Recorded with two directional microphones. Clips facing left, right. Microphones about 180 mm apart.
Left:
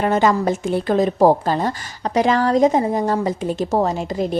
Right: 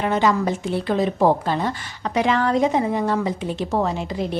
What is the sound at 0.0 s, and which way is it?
A woman's voice, 45° left (ahead or behind).